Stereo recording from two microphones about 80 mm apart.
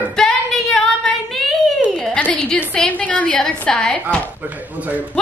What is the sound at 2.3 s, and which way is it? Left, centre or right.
A woman's voice, centre.